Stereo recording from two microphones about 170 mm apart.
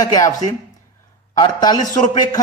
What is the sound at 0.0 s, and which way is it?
Speech, 20° left (ahead or behind).